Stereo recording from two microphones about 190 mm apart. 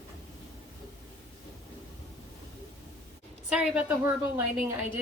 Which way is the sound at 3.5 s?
5° right (ahead or behind).